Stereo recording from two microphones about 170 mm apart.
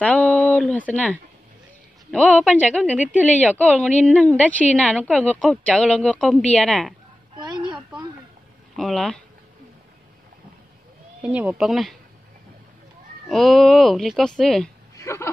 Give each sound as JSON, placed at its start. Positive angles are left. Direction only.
{"t": 0.0, "sound": "a woman's voice", "side_deg": 5}
{"t": 7.3, "sound": "a sound", "side_deg": -25}
{"t": 8.7, "sound": "speech", "side_deg": 0}
{"t": 11.2, "sound": "speech", "side_deg": -5}
{"t": 13.3, "sound": "speech", "side_deg": 0}
{"t": 15.0, "sound": "speech", "side_deg": 15}